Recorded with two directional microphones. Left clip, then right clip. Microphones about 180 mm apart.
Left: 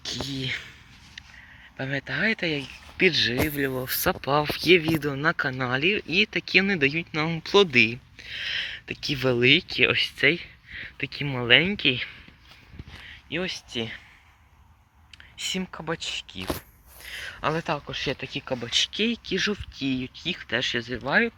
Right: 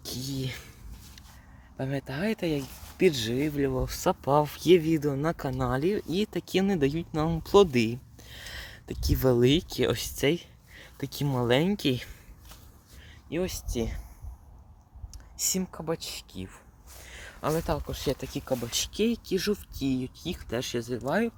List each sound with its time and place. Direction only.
0.0 s speech: 10° right (ahead or behind)
1.7 s speech: 10° right (ahead or behind)
4.1 s speech: 25° right (ahead or behind)
13.3 s speech: 10° right (ahead or behind)
15.4 s speech: 15° right (ahead or behind)
15.6 s speech: 5° right (ahead or behind)
17.0 s a sound: 5° right (ahead or behind)
17.5 s speech: centre (ahead or behind)